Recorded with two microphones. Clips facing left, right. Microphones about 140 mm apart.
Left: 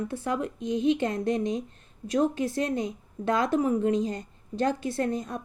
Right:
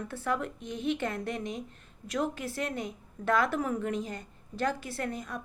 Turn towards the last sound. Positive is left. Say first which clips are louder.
# left 7 dB
turn(degrees=20)  # may be behind; listen again after turning